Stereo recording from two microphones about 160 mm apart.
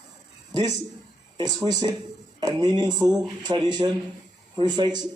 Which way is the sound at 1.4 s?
25° right (ahead or behind).